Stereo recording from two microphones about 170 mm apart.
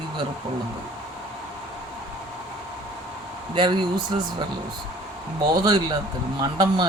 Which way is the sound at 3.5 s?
25° right (ahead or behind).